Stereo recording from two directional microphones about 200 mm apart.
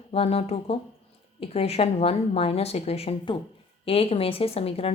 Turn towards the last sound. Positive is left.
turn(degrees=30)  # may be behind; listen again after turning